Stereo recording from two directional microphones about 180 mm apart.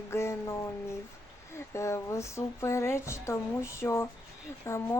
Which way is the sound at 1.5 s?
15° left (ahead or behind).